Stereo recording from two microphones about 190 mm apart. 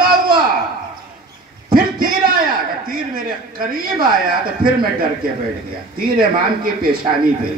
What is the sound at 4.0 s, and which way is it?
Speech, 50° right (ahead or behind).